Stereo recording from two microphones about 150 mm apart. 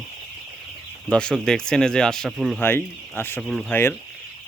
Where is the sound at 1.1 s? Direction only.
5° left (ahead or behind).